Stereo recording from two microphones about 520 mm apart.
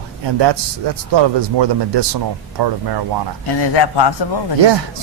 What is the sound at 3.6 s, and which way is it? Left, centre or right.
Speech, left.